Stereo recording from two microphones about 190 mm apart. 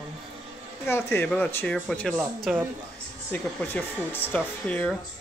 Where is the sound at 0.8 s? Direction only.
10° left (ahead or behind).